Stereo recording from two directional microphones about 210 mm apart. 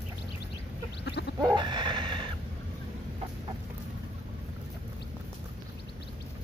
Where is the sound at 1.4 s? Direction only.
20° right (ahead or behind).